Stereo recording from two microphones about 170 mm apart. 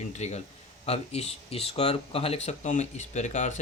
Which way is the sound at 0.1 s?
40° left (ahead or behind).